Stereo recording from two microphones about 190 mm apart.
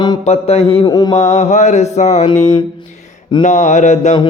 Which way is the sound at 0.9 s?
20° left (ahead or behind).